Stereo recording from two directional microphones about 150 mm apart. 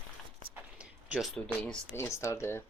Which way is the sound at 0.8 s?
5° right (ahead or behind).